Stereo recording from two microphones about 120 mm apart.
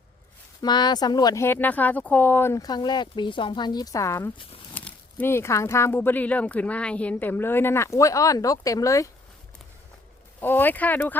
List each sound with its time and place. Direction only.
0.6 s speech: 35° left (ahead or behind)
1.5 s speech: 15° left (ahead or behind)
2.6 s speech: 35° left (ahead or behind)
4.7 s speech: 15° left (ahead or behind)
10.4 s speech: 15° left (ahead or behind)